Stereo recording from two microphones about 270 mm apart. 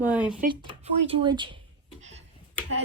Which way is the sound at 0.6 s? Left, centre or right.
Centre.